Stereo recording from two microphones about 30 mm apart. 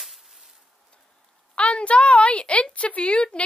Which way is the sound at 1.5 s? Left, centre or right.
Left.